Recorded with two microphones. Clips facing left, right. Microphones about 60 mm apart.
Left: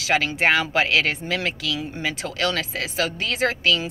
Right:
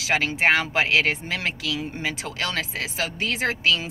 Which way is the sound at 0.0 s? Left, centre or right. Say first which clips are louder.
Left 1 dB; right.